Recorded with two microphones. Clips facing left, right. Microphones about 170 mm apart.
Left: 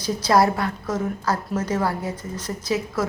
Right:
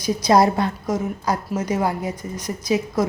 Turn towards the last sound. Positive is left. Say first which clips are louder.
# right 3 dB
turn(degrees=-15)  # may be behind; listen again after turning